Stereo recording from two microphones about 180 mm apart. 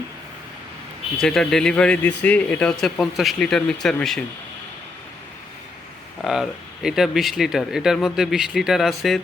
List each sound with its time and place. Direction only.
1.2 s speech: centre (ahead or behind)
6.2 s speech: 5° right (ahead or behind)